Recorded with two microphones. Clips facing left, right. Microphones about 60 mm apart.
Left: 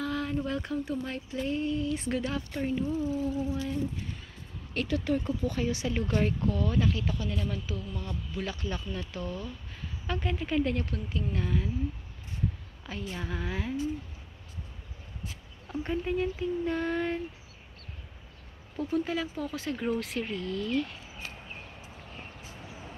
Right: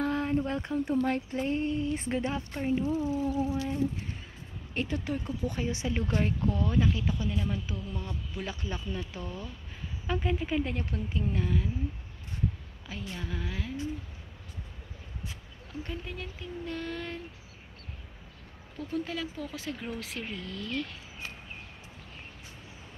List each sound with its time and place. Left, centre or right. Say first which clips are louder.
0.0 s a sound: right 3 dB; right
0.9 s a woman's voice: right 6 dB; right; by 11.2 s centre
11.3 s speech: left 1 dB; centre
12.8 s a woman's voice: left 2 dB; centre
15.7 s speech: left 8 dB; left
18.8 s a woman's voice: left 4 dB; centre